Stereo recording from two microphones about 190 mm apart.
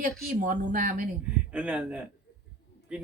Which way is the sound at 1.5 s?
5° right (ahead or behind).